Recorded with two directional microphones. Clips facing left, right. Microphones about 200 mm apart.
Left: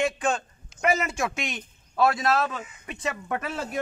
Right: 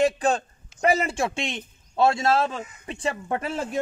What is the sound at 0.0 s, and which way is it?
A man's voice, 35° right (ahead or behind).